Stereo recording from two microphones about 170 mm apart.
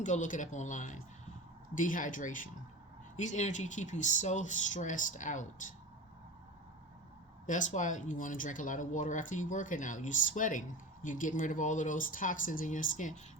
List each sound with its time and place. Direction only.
0.0 s speech: 45° left (ahead or behind)
7.4 s speech: 45° left (ahead or behind)